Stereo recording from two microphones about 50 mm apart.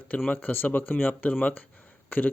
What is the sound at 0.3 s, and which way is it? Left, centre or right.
Speech, left.